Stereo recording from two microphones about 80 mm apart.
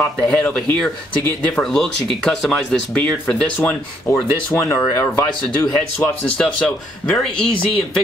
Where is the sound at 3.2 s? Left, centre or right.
Centre.